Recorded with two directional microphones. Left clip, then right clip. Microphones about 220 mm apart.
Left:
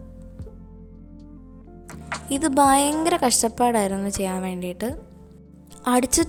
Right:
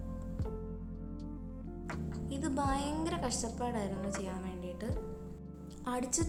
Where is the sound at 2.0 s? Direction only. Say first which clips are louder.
Left 16 dB; 45° left (ahead or behind).